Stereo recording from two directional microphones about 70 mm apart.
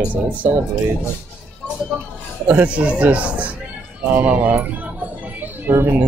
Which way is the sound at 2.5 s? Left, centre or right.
Centre.